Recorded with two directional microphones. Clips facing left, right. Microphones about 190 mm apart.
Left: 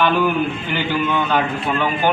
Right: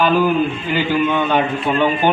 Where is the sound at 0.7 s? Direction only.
15° right (ahead or behind).